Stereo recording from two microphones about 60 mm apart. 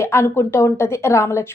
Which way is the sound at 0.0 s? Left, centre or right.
Left.